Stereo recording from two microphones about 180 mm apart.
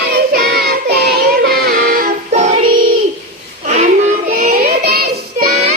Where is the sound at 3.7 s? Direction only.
40° right (ahead or behind).